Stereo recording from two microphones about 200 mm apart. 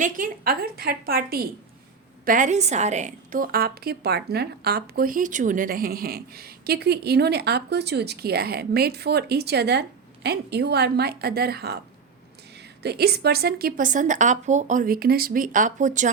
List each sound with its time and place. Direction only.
0.0 s a woman's voice: 45° right (ahead or behind)
12.8 s a woman's voice: 55° right (ahead or behind); by 16.1 s 40° right (ahead or behind)